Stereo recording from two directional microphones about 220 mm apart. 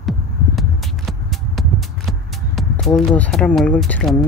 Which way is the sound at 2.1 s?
Centre (ahead or behind).